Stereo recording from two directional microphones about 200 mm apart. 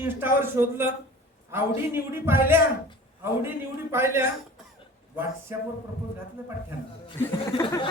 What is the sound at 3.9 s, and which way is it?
Speech, 10° right (ahead or behind).